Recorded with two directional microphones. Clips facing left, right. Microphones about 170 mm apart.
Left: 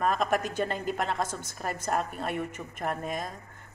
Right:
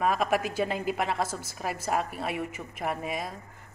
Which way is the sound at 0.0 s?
5° right (ahead or behind).